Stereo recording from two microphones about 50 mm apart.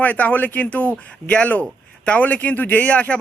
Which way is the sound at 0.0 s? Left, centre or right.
Left.